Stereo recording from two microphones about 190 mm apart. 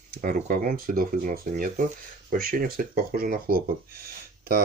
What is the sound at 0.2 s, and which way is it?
Speech, 45° right (ahead or behind).